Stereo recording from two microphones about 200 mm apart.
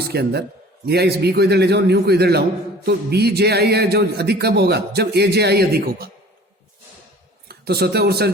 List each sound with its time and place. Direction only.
0.0 s a man's voice: 55° right (ahead or behind)
7.4 s a man's voice: 50° right (ahead or behind)